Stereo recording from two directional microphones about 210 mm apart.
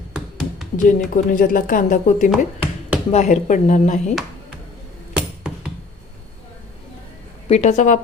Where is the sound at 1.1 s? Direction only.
40° left (ahead or behind).